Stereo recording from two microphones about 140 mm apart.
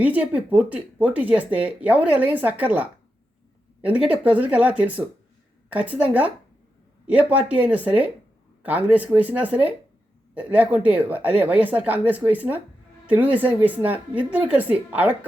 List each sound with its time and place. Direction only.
0.0 s a woman's voice: 10° right (ahead or behind)